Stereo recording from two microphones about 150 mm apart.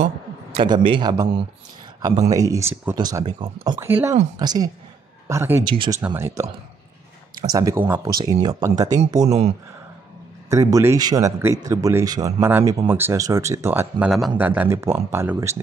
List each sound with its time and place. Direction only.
0.0 s a sound: 45° right (ahead or behind)
0.7 s speech: 30° right (ahead or behind); by 3.0 s 10° right (ahead or behind)
3.0 s speech: 25° right (ahead or behind)
3.8 s speech: 15° right (ahead or behind)
4.4 s speech: 25° right (ahead or behind)
5.3 s speech: 15° right (ahead or behind)
5.6 s speech: 30° right (ahead or behind)
5.9 s speech: 15° right (ahead or behind)
8.2 s speech: 25° right (ahead or behind)
10.5 s speech: 20° right (ahead or behind)